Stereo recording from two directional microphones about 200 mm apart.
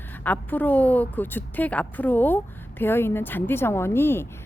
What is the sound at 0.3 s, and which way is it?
A woman's voice, 10° left (ahead or behind).